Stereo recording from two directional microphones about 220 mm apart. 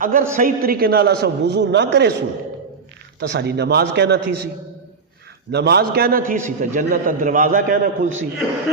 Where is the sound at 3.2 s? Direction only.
50° right (ahead or behind).